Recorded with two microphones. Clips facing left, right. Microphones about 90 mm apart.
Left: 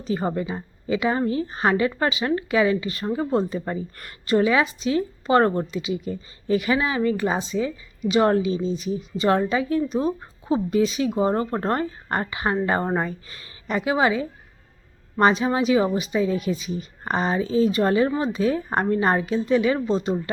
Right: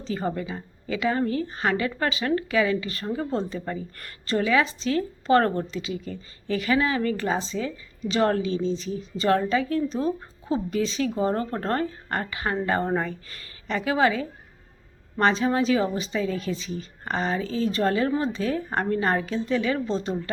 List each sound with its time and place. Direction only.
0.0 s speech: 20° left (ahead or behind)